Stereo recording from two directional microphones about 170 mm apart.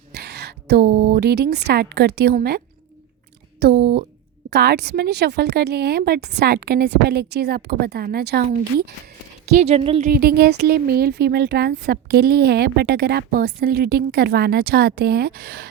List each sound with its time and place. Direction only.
0.1 s a woman's voice: 75° right (ahead or behind)
3.6 s speech: 75° right (ahead or behind)
9.5 s speech: 40° right (ahead or behind)
10.1 s speech: 65° right (ahead or behind)